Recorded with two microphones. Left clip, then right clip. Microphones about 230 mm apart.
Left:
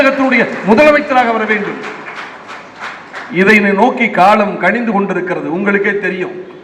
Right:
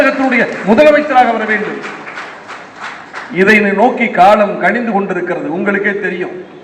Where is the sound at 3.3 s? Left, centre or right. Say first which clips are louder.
Even; left.